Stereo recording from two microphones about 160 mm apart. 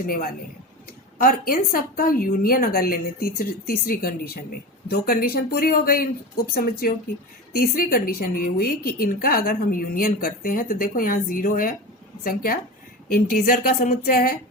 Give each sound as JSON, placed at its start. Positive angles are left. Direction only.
{"t": 0.9, "sound": "speech", "side_deg": 65}